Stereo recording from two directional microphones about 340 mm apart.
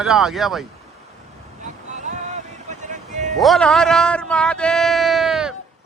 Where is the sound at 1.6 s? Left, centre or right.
Right.